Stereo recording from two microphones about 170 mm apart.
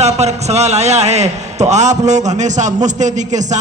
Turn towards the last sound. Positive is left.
turn(degrees=-45)  # may be behind; listen again after turning